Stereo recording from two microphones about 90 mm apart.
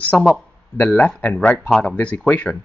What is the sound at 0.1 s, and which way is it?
Speech, 10° left (ahead or behind).